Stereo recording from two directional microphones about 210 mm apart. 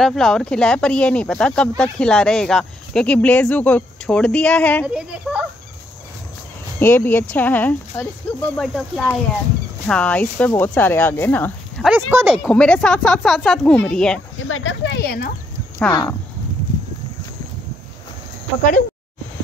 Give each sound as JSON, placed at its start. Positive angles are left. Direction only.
{"t": 0.0, "sound": "speech", "side_deg": 0}
{"t": 4.8, "sound": "speech", "side_deg": -5}
{"t": 6.8, "sound": "speech", "side_deg": 10}
{"t": 11.9, "sound": "speech", "side_deg": -10}
{"t": 12.4, "sound": "speech", "side_deg": 5}
{"t": 14.5, "sound": "speech", "side_deg": 65}
{"t": 15.9, "sound": "speech", "side_deg": 20}